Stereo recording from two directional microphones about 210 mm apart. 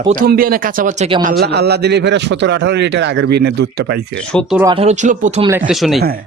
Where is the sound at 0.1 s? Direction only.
45° right (ahead or behind).